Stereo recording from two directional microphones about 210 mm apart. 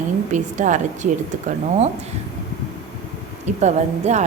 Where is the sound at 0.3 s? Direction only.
35° right (ahead or behind).